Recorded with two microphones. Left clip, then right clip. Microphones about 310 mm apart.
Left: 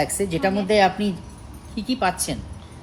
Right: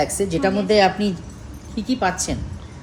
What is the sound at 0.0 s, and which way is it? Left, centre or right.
A woman's voice, left.